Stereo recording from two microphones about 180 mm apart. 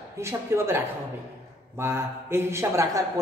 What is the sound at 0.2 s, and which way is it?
A man's voice, 15° right (ahead or behind).